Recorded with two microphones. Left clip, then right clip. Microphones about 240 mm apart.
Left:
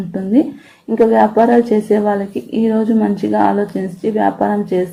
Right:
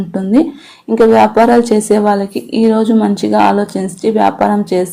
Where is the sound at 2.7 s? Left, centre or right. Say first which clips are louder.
Right 2 dB; right.